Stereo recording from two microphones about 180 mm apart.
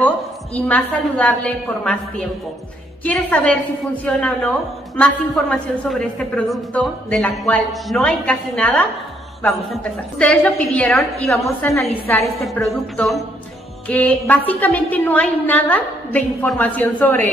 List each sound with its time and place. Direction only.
0.7 s a woman's voice: 10° left (ahead or behind)
11.4 s a woman's voice: 15° left (ahead or behind)